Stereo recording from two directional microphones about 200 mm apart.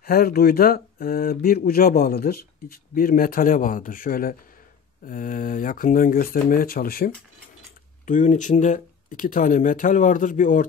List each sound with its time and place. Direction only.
0.0 s speech: 50° left (ahead or behind)